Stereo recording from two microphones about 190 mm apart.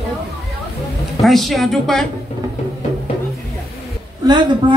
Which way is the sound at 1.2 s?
Centre (ahead or behind).